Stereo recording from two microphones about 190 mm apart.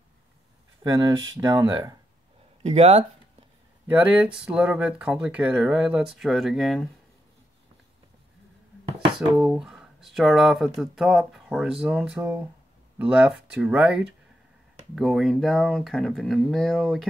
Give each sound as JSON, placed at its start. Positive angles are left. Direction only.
{"t": 0.8, "sound": "speech", "side_deg": -20}
{"t": 2.6, "sound": "speech", "side_deg": -35}
{"t": 3.8, "sound": "speech", "side_deg": -10}
{"t": 9.4, "sound": "speech", "side_deg": -5}